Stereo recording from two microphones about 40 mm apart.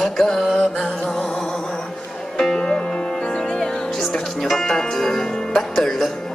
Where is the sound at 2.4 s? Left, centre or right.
Centre.